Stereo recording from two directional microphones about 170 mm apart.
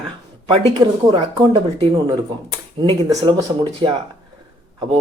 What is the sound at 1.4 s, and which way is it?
Speech, 25° right (ahead or behind).